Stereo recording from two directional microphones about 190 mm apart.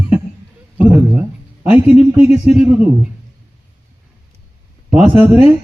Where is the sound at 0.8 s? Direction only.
10° right (ahead or behind).